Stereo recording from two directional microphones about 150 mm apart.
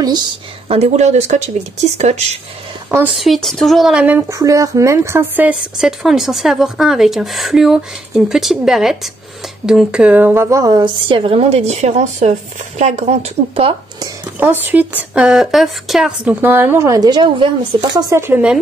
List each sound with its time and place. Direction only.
0.7 s speech: 45° right (ahead or behind)
3.2 s a woman's voice: centre (ahead or behind); by 13.7 s 40° right (ahead or behind)
14.4 s speech: 10° right (ahead or behind)
16.3 s a woman's voice: 15° right (ahead or behind); by 18.0 s 30° right (ahead or behind)
18.1 s speech: 15° right (ahead or behind)